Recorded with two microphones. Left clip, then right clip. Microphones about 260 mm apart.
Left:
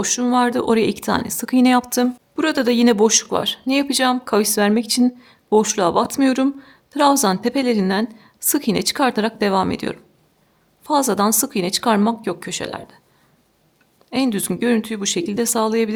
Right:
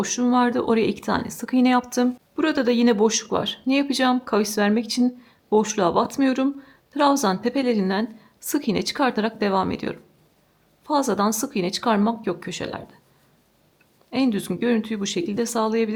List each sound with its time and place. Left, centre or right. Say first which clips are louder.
0.0 s speech: left 3 dB; centre
14.1 s speech: left 3 dB; centre